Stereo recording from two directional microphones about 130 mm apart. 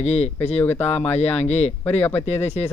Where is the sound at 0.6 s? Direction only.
15° left (ahead or behind).